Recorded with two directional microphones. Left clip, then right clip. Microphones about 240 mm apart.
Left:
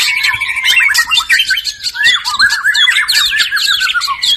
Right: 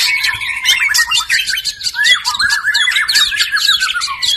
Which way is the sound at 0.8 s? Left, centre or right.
Centre.